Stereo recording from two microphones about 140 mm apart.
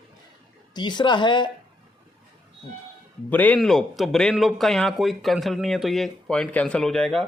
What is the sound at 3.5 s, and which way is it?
Speech, centre (ahead or behind).